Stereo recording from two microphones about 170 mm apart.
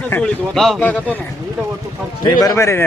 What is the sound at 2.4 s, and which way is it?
Speech, 20° left (ahead or behind).